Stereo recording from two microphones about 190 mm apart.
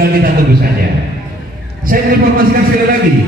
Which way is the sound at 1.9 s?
45° right (ahead or behind).